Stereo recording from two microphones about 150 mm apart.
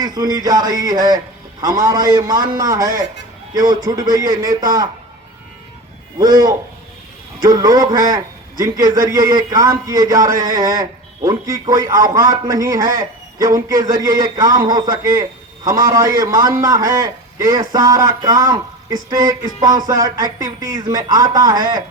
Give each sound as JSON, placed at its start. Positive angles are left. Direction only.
{"t": 0.0, "sound": "a man's voice", "side_deg": -25}
{"t": 6.1, "sound": "a man's voice", "side_deg": -25}